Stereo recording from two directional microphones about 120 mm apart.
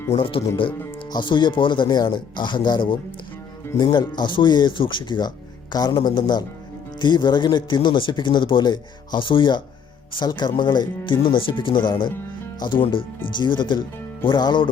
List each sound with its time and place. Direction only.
0.1 s speech: 50° left (ahead or behind)